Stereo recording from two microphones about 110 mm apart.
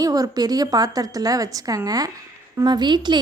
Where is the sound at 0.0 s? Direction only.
35° right (ahead or behind).